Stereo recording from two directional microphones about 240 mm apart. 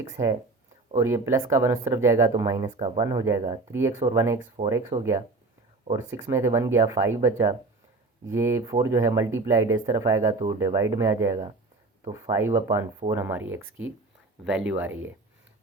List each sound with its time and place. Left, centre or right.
0.9 s speech: centre
2.6 s speech: right
3.0 s speech: centre
4.6 s speech: right
5.9 s speech: centre
13.6 s speech: right
14.4 s speech: centre